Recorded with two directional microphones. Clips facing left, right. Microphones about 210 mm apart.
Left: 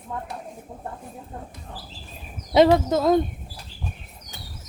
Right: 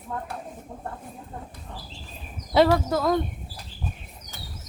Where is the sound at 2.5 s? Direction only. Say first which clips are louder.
Left 3 dB; 20° left (ahead or behind).